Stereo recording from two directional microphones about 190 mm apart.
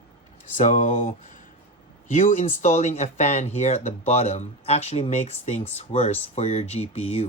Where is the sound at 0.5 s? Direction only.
40° left (ahead or behind).